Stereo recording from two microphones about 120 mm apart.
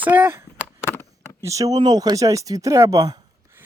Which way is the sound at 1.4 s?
25° right (ahead or behind).